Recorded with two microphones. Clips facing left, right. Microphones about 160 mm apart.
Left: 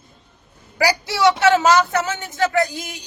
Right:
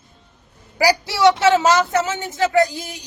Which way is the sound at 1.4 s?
20° right (ahead or behind).